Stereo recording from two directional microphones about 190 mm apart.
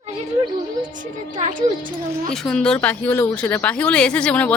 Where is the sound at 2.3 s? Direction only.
5° left (ahead or behind).